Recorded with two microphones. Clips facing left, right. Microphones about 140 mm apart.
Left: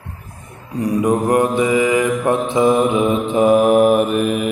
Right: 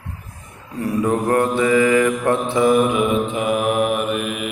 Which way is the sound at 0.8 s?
15° left (ahead or behind).